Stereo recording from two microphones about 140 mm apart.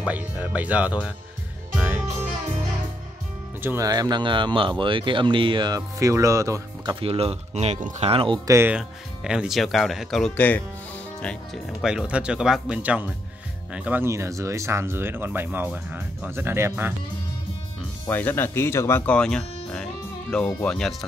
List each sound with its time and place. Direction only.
0.0 s speech: 10° right (ahead or behind)
1.8 s music: 15° right (ahead or behind)
3.6 s speech: 25° right (ahead or behind)
7.0 s speech: 45° right (ahead or behind)
8.5 s speech: 20° right (ahead or behind)
8.7 s speech: 5° right (ahead or behind)
11.8 s speech: 5° right (ahead or behind)
18.0 s speech: 15° left (ahead or behind)